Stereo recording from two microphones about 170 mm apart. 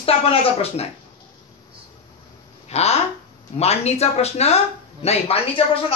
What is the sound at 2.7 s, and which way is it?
Speech, 40° left (ahead or behind).